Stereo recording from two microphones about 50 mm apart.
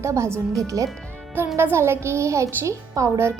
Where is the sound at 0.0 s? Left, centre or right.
Right.